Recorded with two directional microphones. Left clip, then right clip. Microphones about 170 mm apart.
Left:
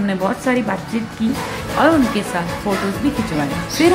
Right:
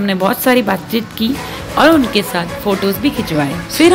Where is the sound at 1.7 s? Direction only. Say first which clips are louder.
Right 5 dB; 20° right (ahead or behind).